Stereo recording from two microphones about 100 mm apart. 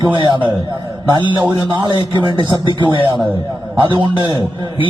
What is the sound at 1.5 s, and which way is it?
Speech, 50° right (ahead or behind).